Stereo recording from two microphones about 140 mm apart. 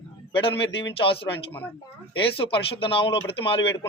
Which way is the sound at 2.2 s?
40° left (ahead or behind).